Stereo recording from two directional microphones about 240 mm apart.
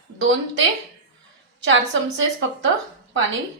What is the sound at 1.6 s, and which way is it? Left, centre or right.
A woman's voice, right.